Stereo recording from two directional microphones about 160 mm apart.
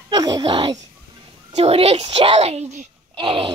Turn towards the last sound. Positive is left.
turn(degrees=-35)  # may be behind; listen again after turning